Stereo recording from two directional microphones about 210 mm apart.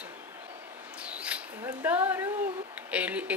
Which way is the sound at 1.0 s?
5° right (ahead or behind).